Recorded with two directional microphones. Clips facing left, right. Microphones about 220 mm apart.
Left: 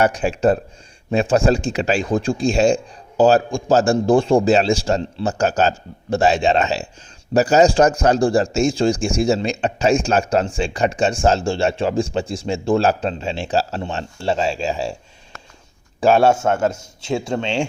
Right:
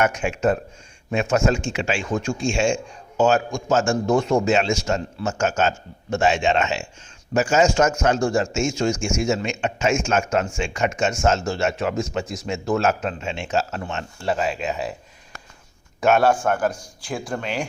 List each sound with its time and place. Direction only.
0.0 s speech: 35° left (ahead or behind)
16.0 s a man's voice: 30° left (ahead or behind)